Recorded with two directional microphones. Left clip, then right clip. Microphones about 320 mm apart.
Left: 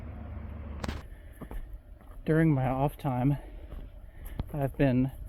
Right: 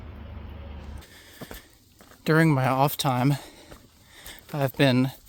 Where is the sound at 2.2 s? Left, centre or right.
Right.